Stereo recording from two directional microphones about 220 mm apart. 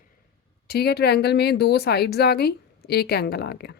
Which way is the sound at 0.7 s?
45° left (ahead or behind).